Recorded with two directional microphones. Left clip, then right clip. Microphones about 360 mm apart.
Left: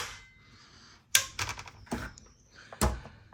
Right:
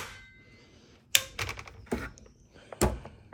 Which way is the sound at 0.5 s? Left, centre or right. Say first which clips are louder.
Left 2 dB; centre.